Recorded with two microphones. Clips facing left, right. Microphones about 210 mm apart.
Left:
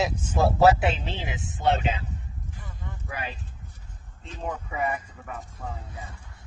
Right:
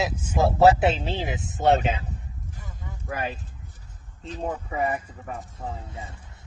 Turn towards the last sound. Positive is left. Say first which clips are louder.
# right 3 dB
turn(degrees=-25)  # may be behind; listen again after turning